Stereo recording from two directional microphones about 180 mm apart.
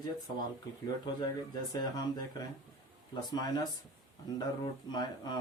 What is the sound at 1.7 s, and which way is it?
Speech, 20° left (ahead or behind).